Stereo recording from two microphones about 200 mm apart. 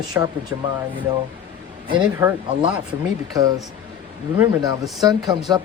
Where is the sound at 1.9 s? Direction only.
20° right (ahead or behind).